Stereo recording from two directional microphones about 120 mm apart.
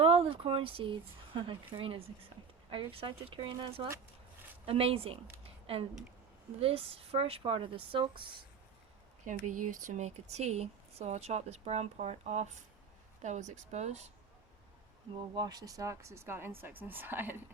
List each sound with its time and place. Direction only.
0.0 s a woman's voice: 55° right (ahead or behind)
9.2 s speech: 90° right; by 12.5 s 70° right (ahead or behind)
13.2 s speech: 80° right
15.4 s speech: 35° right (ahead or behind); by 17.3 s 15° right (ahead or behind)